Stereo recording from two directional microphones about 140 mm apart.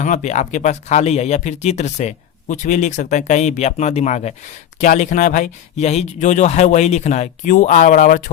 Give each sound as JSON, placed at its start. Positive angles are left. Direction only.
{"t": 0.0, "sound": "speech", "side_deg": 60}
{"t": 7.9, "sound": "speech", "side_deg": 85}